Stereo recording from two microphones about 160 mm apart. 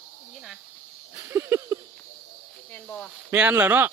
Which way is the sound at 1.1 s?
15° right (ahead or behind).